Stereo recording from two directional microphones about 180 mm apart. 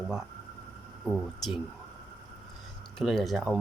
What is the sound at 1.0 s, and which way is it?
Speech, centre (ahead or behind).